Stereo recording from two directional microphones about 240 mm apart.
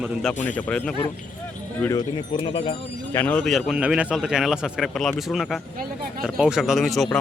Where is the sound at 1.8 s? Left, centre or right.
Centre.